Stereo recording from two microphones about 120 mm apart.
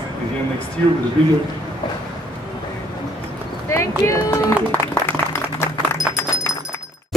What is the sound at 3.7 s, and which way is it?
Clip-clop, 25° left (ahead or behind).